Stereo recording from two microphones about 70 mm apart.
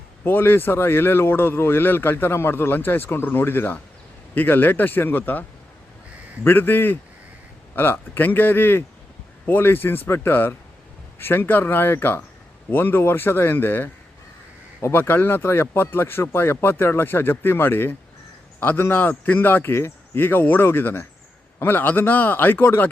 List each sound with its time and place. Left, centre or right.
0.3 s speech: left
14.9 s speech: left